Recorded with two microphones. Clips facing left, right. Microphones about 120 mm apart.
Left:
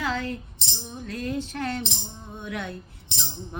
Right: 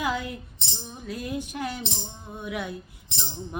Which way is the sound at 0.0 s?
10° right (ahead or behind).